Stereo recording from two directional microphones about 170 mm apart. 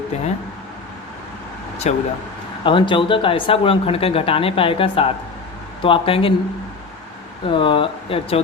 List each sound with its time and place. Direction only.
1.9 s speech: 40° left (ahead or behind)
2.6 s speech: 30° left (ahead or behind)
7.4 s speech: 30° left (ahead or behind)